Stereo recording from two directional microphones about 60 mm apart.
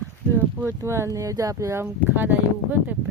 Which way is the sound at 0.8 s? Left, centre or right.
Right.